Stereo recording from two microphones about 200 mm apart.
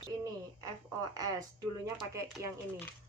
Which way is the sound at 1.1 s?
20° right (ahead or behind).